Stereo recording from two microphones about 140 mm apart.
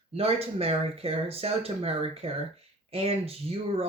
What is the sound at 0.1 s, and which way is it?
Speech, 45° right (ahead or behind).